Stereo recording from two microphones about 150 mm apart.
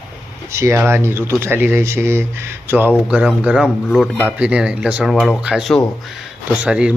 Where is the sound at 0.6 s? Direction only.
15° right (ahead or behind).